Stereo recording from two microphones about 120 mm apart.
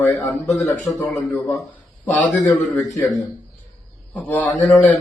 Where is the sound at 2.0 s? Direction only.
15° left (ahead or behind).